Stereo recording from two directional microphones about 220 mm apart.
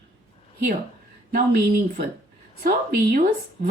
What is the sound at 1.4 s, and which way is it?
Speech, 45° right (ahead or behind).